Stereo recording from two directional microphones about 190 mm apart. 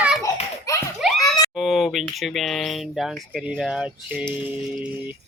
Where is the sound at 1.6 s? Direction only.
Centre (ahead or behind).